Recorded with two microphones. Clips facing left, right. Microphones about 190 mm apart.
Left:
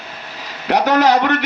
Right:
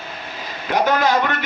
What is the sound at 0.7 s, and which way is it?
Speech, 75° left (ahead or behind).